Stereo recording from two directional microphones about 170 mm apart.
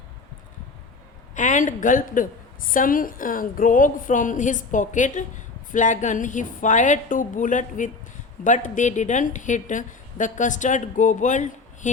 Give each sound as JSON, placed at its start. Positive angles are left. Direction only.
{"t": 1.4, "sound": "a woman's voice", "side_deg": 50}